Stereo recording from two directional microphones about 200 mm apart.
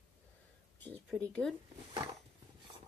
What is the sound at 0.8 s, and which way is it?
Speech, 5° left (ahead or behind).